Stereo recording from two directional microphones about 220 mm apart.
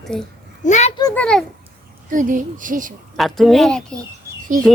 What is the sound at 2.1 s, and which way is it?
Speech, 35° right (ahead or behind).